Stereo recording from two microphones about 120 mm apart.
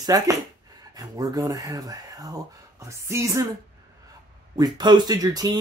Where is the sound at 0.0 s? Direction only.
30° right (ahead or behind).